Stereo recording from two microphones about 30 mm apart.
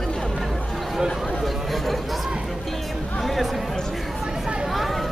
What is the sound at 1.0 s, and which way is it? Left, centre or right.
Speech, centre.